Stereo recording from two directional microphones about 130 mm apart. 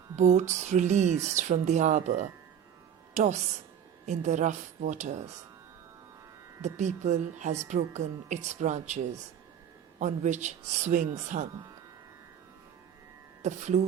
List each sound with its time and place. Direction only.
0.2 s speech: 60° right (ahead or behind)
6.7 s speech: 65° right (ahead or behind)
10.0 s speech: 65° right (ahead or behind)
13.4 s speech: 65° right (ahead or behind)